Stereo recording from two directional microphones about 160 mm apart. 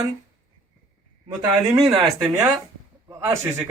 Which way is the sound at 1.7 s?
25° right (ahead or behind).